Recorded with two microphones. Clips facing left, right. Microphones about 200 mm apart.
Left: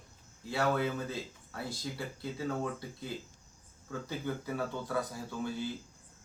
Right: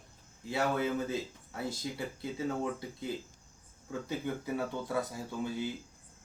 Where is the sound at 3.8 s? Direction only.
20° right (ahead or behind).